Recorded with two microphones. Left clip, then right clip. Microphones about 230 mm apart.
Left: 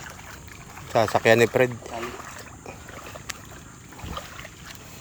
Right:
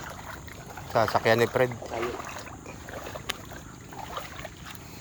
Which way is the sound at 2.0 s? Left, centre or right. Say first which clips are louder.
Right 2 dB; right.